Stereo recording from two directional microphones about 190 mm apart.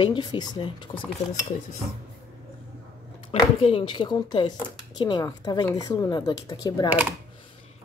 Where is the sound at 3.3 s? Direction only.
25° left (ahead or behind).